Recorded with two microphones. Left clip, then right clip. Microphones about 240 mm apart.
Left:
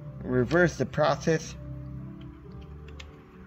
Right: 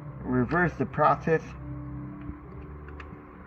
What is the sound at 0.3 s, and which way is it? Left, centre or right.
Speech, left.